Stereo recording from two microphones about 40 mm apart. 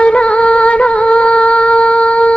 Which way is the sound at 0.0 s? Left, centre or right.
Left.